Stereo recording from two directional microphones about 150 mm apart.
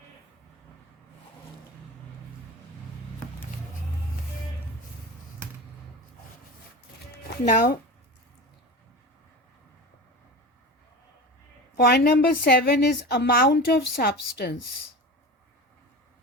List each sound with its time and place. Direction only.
7.4 s speech: 65° left (ahead or behind)
11.8 s a woman's voice: 90° left